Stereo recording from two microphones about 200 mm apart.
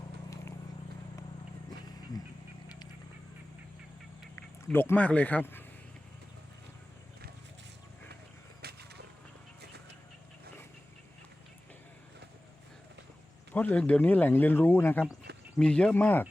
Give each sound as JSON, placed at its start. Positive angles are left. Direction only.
{"t": 4.7, "sound": "speech", "side_deg": 10}
{"t": 8.6, "sound": "a sound", "side_deg": -55}
{"t": 13.5, "sound": "speech", "side_deg": 10}